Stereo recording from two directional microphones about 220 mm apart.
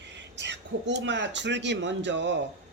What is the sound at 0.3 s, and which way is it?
Speech, 50° right (ahead or behind).